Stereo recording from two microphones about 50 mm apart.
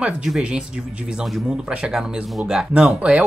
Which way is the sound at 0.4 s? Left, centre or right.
Centre.